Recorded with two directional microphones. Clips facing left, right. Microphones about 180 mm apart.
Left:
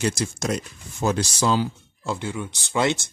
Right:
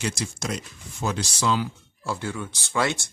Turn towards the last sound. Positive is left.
turn(degrees=20)  # may be behind; listen again after turning